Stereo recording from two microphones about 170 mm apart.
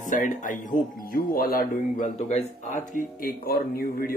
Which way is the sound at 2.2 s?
40° left (ahead or behind).